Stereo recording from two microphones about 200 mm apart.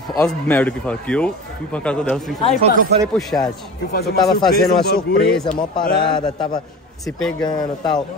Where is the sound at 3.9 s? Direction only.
50° left (ahead or behind).